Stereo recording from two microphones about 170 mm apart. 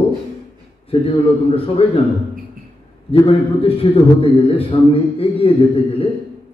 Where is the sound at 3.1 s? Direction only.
35° left (ahead or behind).